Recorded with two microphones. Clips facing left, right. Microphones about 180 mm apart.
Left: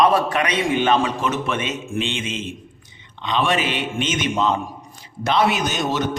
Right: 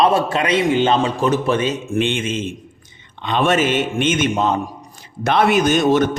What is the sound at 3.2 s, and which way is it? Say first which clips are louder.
A man's voice: right 4 dB; 50° right (ahead or behind).